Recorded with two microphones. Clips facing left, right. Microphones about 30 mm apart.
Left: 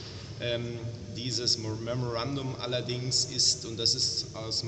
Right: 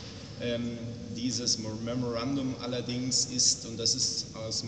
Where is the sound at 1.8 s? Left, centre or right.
Centre.